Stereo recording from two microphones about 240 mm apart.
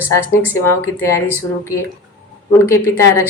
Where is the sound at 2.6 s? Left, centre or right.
Centre.